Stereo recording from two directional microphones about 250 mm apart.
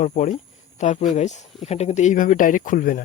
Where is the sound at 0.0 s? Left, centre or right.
Left.